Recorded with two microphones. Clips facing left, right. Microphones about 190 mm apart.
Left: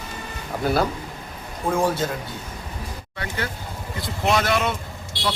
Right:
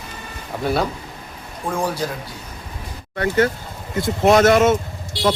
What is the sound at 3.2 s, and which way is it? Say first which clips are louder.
Speech: right 12 dB; 50° right (ahead or behind).